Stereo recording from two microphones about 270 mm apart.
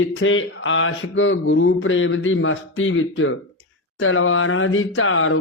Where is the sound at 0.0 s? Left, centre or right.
Left.